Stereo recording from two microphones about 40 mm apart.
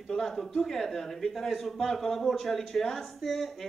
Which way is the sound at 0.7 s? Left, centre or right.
Centre.